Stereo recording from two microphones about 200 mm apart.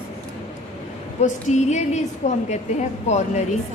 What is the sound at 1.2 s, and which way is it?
A woman's voice, 35° left (ahead or behind).